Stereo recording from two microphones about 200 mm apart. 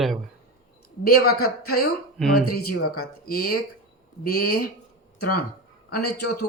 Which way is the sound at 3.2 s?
50° left (ahead or behind).